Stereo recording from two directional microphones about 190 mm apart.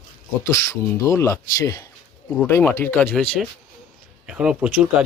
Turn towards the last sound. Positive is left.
turn(degrees=-5)  # may be behind; listen again after turning